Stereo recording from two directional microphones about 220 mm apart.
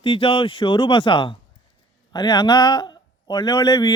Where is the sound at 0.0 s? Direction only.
25° left (ahead or behind).